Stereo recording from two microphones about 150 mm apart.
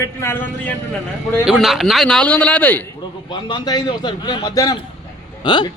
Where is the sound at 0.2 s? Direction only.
15° left (ahead or behind).